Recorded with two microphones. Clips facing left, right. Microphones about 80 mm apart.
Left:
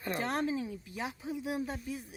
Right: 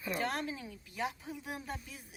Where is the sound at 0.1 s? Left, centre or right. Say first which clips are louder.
Left 4 dB; left.